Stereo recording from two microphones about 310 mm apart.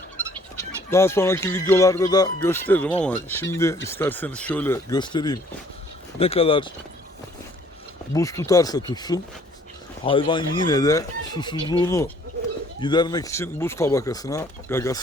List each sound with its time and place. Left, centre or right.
0.9 s speech: centre
8.1 s speech: centre